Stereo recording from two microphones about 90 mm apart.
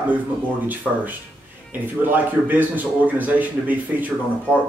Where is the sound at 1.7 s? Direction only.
20° right (ahead or behind).